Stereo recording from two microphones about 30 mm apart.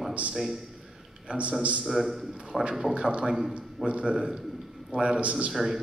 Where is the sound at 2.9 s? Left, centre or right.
Right.